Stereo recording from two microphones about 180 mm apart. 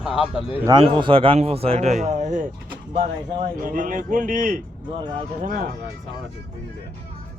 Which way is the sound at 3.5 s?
50° right (ahead or behind).